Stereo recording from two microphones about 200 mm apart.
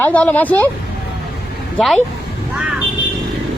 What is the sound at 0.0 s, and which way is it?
Speech, 10° left (ahead or behind).